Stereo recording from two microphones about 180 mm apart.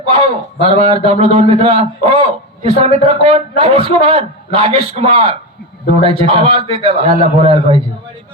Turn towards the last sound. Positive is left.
turn(degrees=-30)  # may be behind; listen again after turning